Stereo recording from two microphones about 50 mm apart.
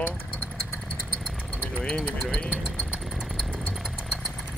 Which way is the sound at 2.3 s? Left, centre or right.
Left.